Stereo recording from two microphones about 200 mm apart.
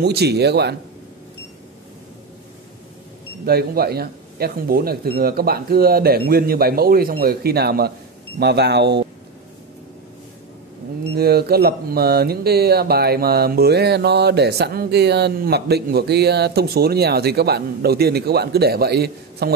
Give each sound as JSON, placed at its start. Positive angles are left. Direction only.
{"t": 0.0, "sound": "a man's voice", "side_deg": -55}
{"t": 3.4, "sound": "a man's voice", "side_deg": -50}
{"t": 11.1, "sound": "speech", "side_deg": -50}